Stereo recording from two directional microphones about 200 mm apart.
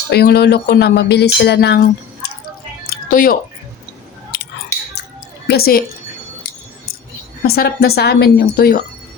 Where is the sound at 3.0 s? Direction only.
45° left (ahead or behind).